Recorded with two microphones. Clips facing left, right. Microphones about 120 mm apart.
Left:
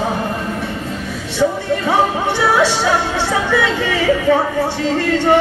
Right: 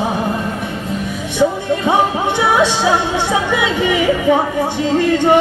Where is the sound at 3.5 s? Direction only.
15° right (ahead or behind).